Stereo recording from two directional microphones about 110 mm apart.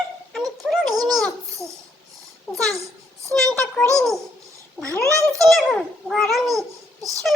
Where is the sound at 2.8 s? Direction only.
30° right (ahead or behind).